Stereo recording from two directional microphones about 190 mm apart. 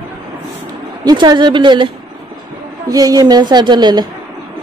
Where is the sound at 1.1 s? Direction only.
20° right (ahead or behind).